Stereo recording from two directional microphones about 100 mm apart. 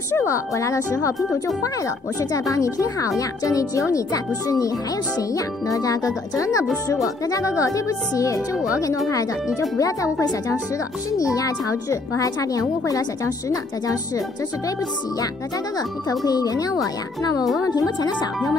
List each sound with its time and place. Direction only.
0.1 s a woman's voice: 30° left (ahead or behind)
2.5 s speech: 35° left (ahead or behind)
11.1 s speech: 35° left (ahead or behind)
16.3 s speech: 40° left (ahead or behind)